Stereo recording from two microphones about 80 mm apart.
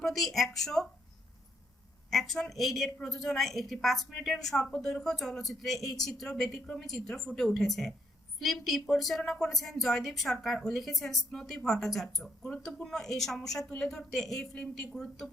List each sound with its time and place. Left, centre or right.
0.0 s speech: centre
2.0 s speech: centre